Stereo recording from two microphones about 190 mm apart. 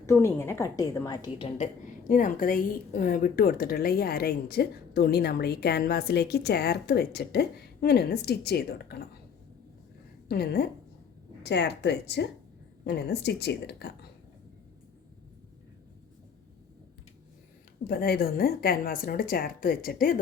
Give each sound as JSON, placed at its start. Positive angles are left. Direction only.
{"t": 0.0, "sound": "a woman's voice", "side_deg": 15}
{"t": 10.2, "sound": "a woman's voice", "side_deg": 55}
{"t": 17.8, "sound": "a woman's voice", "side_deg": 55}